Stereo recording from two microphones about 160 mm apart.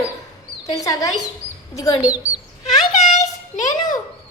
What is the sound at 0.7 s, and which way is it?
Speech, 20° left (ahead or behind).